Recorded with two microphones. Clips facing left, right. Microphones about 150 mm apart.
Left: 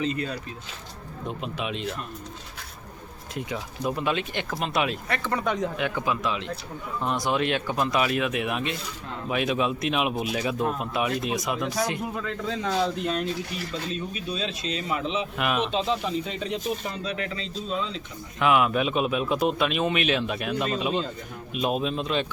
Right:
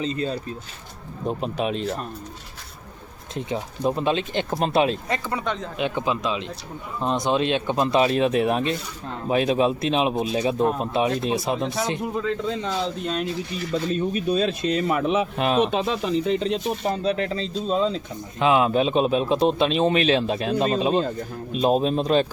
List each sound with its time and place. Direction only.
0.0 s speech: 30° right (ahead or behind)
3.3 s speech: 30° right (ahead or behind)
5.2 s speech: 5° right (ahead or behind)
5.7 s speech: 20° right (ahead or behind)
13.9 s speech: 50° right (ahead or behind)
15.4 s speech: 30° right (ahead or behind)
15.6 s speech: 60° right (ahead or behind)
16.6 s speech: 40° right (ahead or behind)
18.3 s speech: 25° right (ahead or behind)